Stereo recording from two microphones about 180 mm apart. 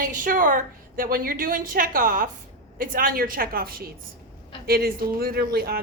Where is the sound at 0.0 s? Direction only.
50° right (ahead or behind).